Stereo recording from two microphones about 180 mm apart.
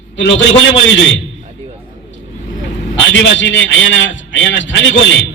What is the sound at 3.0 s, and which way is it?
A man's voice, 90° left.